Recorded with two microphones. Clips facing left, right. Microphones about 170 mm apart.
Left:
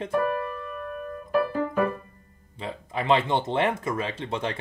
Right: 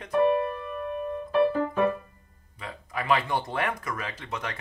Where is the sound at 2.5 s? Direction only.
25° left (ahead or behind).